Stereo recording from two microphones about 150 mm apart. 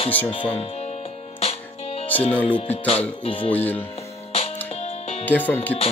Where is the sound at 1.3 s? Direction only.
40° left (ahead or behind).